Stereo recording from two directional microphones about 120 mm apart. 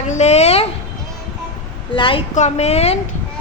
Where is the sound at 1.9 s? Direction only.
45° left (ahead or behind).